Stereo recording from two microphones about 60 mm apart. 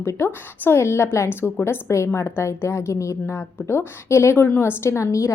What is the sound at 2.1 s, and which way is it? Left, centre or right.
A woman's voice, left.